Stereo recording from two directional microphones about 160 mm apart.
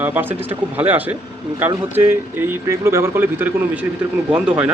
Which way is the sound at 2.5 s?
15° right (ahead or behind).